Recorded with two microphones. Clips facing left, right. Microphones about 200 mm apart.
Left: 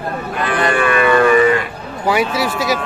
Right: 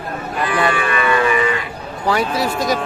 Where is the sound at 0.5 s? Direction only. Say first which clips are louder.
Left 4 dB; 50° left (ahead or behind).